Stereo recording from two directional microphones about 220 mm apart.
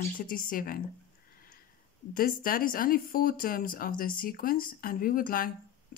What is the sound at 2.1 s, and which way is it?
Speech, 40° left (ahead or behind).